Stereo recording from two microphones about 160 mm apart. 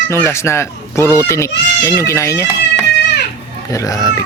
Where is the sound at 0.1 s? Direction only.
15° left (ahead or behind).